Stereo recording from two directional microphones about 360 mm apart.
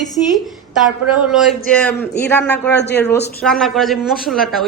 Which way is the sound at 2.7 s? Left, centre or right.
Left.